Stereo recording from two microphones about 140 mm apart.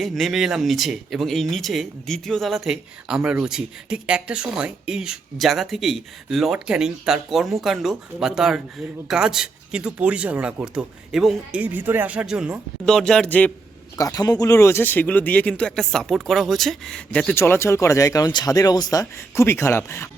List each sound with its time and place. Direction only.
0.0 s speech: centre (ahead or behind)
11.6 s speech: 15° right (ahead or behind); by 13.5 s 10° left (ahead or behind)
13.9 s speech: 25° left (ahead or behind); by 17.3 s 5° left (ahead or behind)
17.3 s speech: 15° left (ahead or behind)